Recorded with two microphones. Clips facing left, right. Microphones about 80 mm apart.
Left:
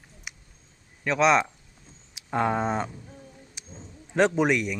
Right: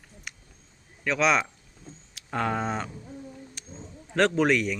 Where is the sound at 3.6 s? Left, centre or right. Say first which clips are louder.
Right 1 dB; centre.